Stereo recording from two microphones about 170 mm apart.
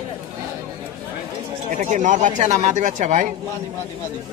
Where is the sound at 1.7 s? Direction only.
50° right (ahead or behind).